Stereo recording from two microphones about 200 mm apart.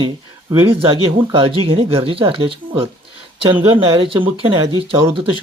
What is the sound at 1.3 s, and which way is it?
Speech, 25° right (ahead or behind).